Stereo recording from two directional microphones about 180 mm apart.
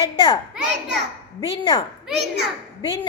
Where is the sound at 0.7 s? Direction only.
75° right (ahead or behind).